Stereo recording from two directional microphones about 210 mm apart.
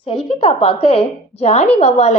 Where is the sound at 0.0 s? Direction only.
25° left (ahead or behind).